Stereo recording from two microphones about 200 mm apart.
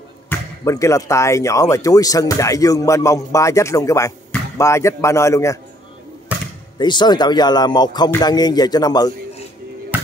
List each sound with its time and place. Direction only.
0.3 s speech: 15° left (ahead or behind)
6.3 s a sound: 5° right (ahead or behind)
6.8 s speech: 20° left (ahead or behind)